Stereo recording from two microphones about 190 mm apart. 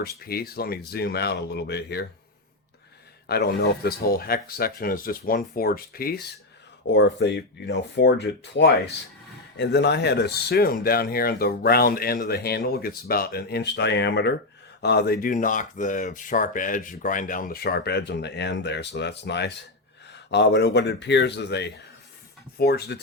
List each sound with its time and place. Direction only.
0.0 s speech: 55° left (ahead or behind)
3.2 s speech: 55° left (ahead or behind)
6.8 s speech: 65° left (ahead or behind)